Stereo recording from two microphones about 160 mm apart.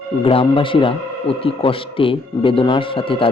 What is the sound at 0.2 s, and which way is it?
Speech, 35° left (ahead or behind).